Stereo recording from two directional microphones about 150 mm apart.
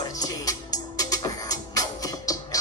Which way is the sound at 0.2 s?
25° left (ahead or behind).